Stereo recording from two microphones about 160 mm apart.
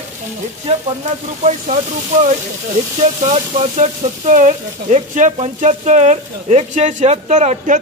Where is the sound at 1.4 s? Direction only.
45° right (ahead or behind).